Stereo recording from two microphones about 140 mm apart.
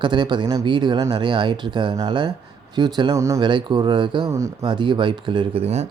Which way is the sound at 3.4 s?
35° right (ahead or behind).